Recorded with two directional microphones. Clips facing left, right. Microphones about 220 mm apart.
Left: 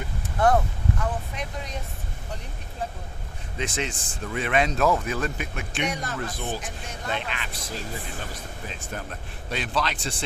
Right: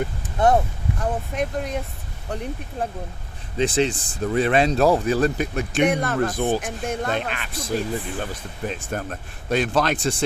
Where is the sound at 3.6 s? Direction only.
35° right (ahead or behind).